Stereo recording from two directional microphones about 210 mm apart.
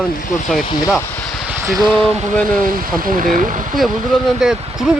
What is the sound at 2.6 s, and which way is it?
Speech, 40° right (ahead or behind).